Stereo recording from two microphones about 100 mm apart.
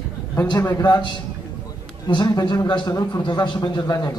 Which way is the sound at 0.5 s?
45° left (ahead or behind).